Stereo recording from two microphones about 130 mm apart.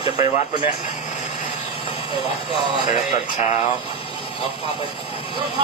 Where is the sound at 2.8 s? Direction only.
65° left (ahead or behind).